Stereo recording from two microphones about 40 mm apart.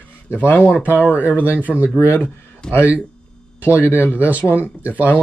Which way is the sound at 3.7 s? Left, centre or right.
Left.